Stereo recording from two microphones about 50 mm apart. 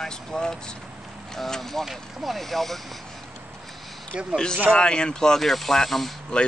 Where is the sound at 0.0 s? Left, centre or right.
Centre.